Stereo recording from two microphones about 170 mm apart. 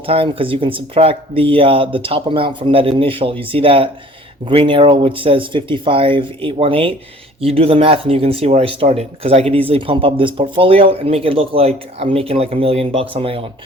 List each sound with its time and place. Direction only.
0.0 s speech: 35° right (ahead or behind)